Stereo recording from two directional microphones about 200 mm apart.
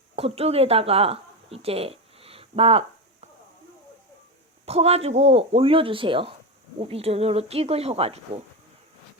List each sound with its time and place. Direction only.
0.2 s speech: 30° right (ahead or behind)
4.6 s speech: 30° right (ahead or behind)